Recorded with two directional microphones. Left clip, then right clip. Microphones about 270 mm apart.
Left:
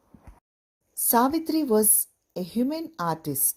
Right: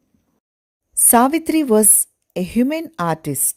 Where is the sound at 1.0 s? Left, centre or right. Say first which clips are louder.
Right 8 dB; right.